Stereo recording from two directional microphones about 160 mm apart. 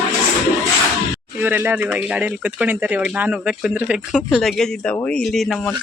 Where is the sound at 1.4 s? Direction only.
10° right (ahead or behind).